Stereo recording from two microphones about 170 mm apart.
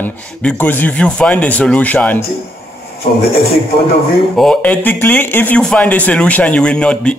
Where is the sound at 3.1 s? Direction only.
70° left (ahead or behind).